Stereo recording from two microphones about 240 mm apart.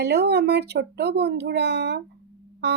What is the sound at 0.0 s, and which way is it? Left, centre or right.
Speech, right.